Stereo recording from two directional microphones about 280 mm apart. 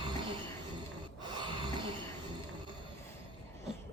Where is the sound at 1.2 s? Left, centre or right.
Centre.